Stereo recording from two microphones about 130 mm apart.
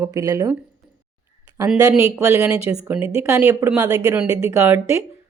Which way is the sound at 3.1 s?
20° right (ahead or behind).